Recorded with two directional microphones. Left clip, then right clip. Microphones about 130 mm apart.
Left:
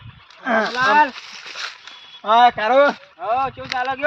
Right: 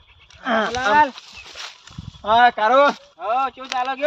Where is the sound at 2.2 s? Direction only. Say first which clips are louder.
Left 1 dB; 5° left (ahead or behind).